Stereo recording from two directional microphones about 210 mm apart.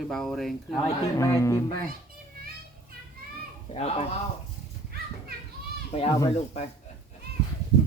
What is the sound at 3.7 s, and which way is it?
Speech, 25° left (ahead or behind).